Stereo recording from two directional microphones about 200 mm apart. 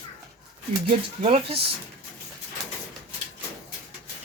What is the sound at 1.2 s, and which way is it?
Speech, 30° right (ahead or behind).